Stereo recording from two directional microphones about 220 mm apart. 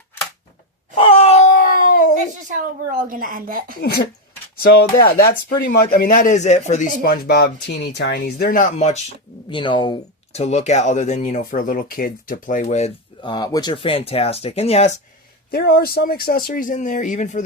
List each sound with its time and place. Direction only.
0.9 s a sound: 25° left (ahead or behind)
2.5 s speech: 35° right (ahead or behind)
3.8 s speech: 45° left (ahead or behind); by 14.9 s 30° left (ahead or behind)
15.4 s speech: 45° left (ahead or behind)